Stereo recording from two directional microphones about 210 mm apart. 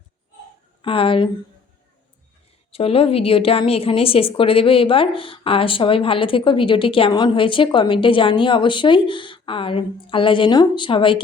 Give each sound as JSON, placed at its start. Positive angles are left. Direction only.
{"t": 0.8, "sound": "a woman's voice", "side_deg": 25}
{"t": 2.7, "sound": "a woman's voice", "side_deg": 25}